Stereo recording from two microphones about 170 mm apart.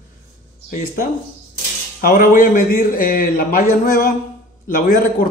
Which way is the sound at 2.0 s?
55° left (ahead or behind).